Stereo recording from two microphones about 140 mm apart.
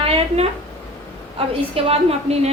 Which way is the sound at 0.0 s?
45° right (ahead or behind).